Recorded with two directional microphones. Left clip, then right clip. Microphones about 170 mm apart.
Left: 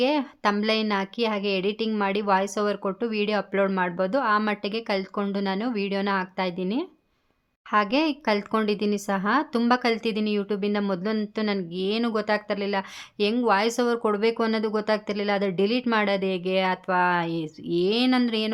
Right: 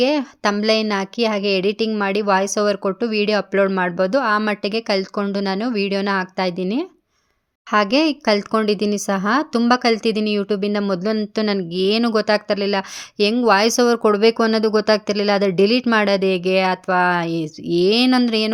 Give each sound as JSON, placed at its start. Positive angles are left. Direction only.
{"t": 0.0, "sound": "a woman's voice", "side_deg": -25}